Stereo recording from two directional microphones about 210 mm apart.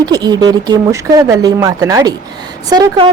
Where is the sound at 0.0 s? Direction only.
20° right (ahead or behind).